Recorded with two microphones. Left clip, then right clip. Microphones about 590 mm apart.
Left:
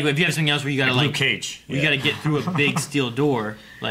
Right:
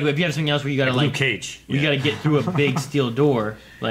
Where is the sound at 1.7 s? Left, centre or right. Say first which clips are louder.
Even; right.